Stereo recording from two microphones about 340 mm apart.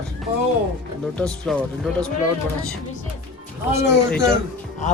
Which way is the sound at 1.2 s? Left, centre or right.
Centre.